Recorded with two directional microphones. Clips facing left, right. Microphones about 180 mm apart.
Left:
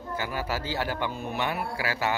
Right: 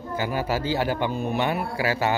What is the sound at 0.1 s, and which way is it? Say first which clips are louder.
Speech: right 5 dB; 20° right (ahead or behind).